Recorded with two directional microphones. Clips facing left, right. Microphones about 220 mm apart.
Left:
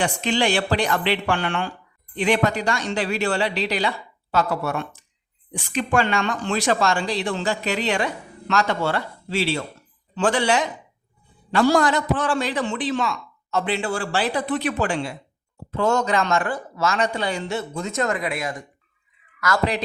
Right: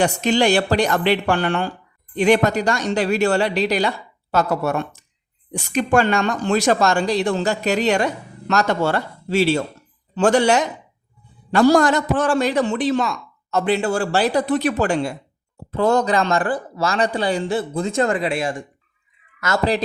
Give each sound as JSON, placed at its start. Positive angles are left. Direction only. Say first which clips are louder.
{"t": 0.0, "sound": "a woman's voice", "louder": "right 5 dB", "side_deg": -40}